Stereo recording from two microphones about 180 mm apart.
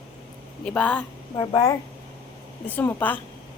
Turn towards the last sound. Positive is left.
turn(degrees=10)  # may be behind; listen again after turning